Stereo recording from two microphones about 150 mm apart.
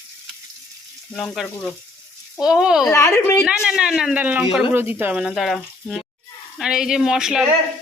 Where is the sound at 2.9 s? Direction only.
20° left (ahead or behind).